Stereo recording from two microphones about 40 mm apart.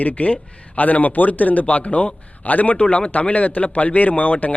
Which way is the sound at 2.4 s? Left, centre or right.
Left.